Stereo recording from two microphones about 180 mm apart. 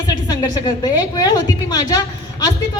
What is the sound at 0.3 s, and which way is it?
A woman's voice, 25° left (ahead or behind).